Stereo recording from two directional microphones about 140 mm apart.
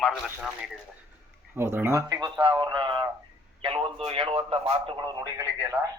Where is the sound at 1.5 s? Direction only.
15° right (ahead or behind).